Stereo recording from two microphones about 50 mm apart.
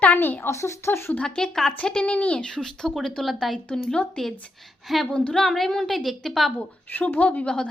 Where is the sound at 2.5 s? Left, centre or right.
Centre.